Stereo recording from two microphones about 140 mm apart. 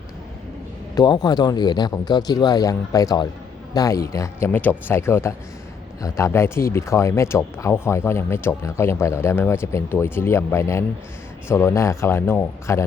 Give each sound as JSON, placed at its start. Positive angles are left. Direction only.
{"t": 0.9, "sound": "speech", "side_deg": 30}